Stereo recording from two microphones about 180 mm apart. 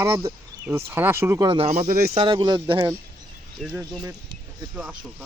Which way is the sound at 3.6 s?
Centre (ahead or behind).